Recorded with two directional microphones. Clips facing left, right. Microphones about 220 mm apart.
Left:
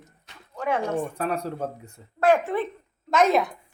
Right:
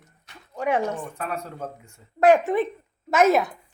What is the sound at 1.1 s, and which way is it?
Speech, 35° left (ahead or behind).